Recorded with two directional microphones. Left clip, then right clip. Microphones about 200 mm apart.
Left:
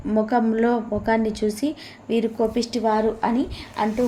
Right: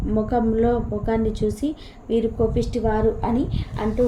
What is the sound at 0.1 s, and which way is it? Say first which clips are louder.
A woman's voice: left 1 dB; 15° left (ahead or behind).